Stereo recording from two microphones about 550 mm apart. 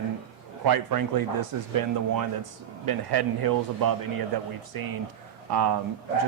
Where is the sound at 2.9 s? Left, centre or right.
Right.